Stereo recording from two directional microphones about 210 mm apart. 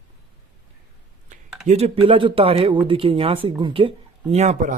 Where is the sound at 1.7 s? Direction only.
30° right (ahead or behind).